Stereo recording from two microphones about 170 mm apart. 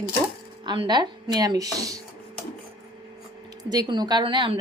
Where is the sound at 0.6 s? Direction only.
25° right (ahead or behind).